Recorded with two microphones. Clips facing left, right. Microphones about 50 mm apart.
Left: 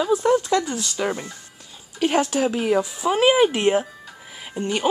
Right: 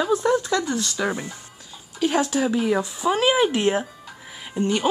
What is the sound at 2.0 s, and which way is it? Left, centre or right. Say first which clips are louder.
Speech: left 1 dB; left.